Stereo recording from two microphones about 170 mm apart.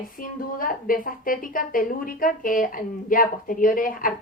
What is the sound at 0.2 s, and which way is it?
A woman's voice, 55° left (ahead or behind).